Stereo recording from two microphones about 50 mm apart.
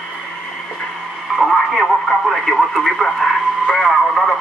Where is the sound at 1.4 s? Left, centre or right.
Centre.